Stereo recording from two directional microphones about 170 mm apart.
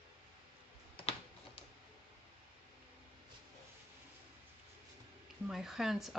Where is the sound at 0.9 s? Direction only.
35° left (ahead or behind).